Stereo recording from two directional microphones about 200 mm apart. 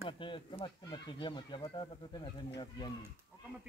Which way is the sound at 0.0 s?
25° left (ahead or behind).